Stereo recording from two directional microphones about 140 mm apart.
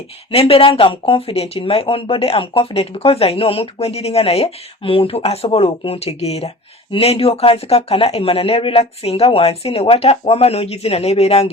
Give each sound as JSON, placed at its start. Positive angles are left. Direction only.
{"t": 0.3, "sound": "speech", "side_deg": 45}